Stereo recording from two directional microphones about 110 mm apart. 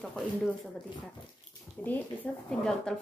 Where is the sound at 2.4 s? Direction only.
5° left (ahead or behind).